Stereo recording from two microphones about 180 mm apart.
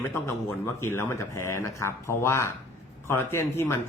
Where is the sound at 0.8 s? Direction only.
15° left (ahead or behind).